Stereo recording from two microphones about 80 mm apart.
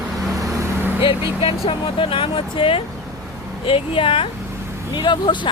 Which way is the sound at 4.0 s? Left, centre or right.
Left.